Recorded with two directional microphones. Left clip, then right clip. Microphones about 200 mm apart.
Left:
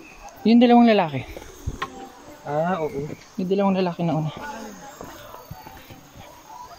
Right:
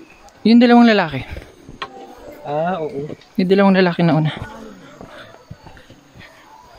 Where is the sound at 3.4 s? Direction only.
40° right (ahead or behind).